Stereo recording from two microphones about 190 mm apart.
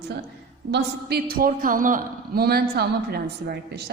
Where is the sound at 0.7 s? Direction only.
55° right (ahead or behind).